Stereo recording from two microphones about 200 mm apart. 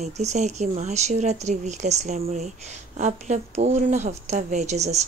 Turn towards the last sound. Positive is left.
turn(degrees=-35)  # may be behind; listen again after turning